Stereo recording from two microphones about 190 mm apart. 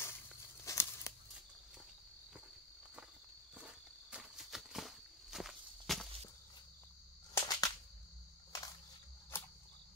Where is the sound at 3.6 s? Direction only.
5° right (ahead or behind).